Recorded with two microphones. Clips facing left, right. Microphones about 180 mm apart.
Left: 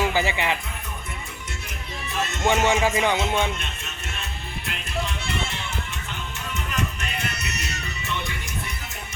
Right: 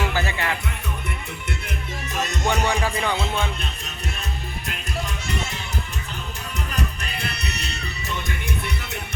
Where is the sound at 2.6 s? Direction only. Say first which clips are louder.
Left 3 dB; 15° left (ahead or behind).